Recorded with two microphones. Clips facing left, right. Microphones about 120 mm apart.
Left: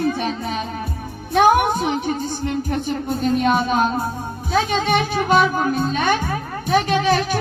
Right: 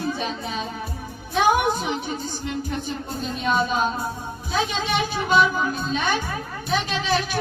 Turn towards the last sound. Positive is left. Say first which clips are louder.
# left 6 dB
turn(degrees=50)  # may be behind; listen again after turning